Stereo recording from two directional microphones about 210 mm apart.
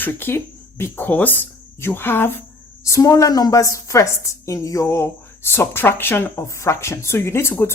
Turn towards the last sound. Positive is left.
turn(degrees=10)  # may be behind; listen again after turning